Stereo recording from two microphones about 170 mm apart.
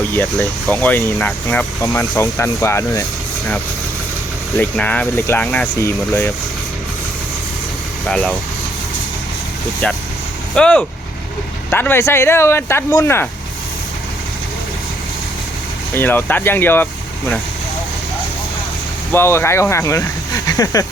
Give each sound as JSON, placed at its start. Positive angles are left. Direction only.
{"t": 0.1, "sound": "speech", "side_deg": 10}
{"t": 4.5, "sound": "speech", "side_deg": 10}
{"t": 8.0, "sound": "speech", "side_deg": 5}
{"t": 9.8, "sound": "speech", "side_deg": 10}
{"t": 16.0, "sound": "speech", "side_deg": 10}
{"t": 19.1, "sound": "speech", "side_deg": 15}